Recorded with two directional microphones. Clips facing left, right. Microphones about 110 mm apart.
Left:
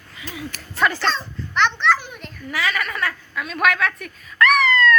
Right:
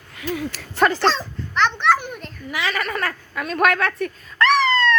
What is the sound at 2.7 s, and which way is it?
Chuckle, 35° right (ahead or behind).